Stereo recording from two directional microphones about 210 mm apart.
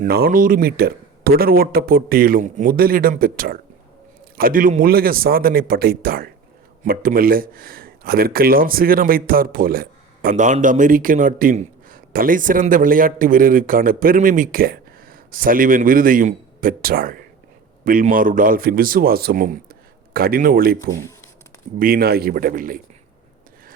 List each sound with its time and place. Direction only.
0.0 s a man's voice: 45° right (ahead or behind)